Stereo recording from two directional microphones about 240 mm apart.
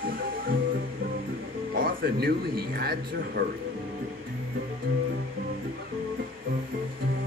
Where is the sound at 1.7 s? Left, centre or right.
Right.